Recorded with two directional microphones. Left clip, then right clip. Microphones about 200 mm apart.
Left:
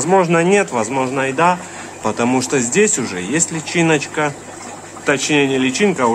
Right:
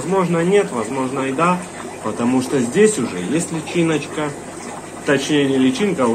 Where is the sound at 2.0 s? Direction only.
30° left (ahead or behind).